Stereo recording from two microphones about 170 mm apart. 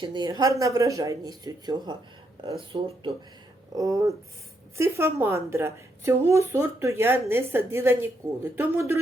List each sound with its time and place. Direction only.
0.0 s speech: 25° right (ahead or behind)
3.8 s speech: 20° right (ahead or behind)